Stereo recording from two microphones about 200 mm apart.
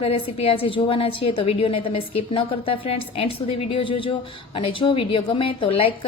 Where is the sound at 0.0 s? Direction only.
30° left (ahead or behind).